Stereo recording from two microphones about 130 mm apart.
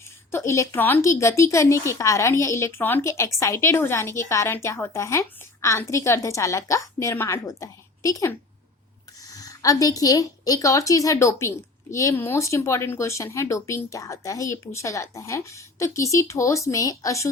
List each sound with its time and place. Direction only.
0.3 s a woman's voice: 20° left (ahead or behind)